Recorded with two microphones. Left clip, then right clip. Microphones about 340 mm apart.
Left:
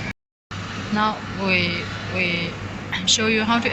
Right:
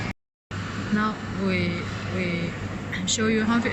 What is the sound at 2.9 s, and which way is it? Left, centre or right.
Speech, centre.